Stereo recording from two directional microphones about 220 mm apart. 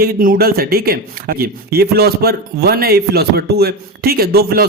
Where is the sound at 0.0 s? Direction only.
40° right (ahead or behind).